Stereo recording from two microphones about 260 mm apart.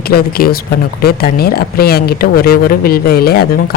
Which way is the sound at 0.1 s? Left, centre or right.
Left.